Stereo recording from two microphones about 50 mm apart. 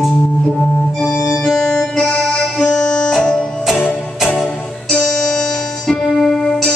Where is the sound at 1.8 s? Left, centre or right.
Centre.